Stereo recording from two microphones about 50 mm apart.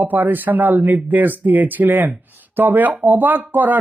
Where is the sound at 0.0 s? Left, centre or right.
Right.